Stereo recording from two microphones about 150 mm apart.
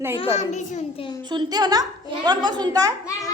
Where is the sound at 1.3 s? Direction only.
30° right (ahead or behind).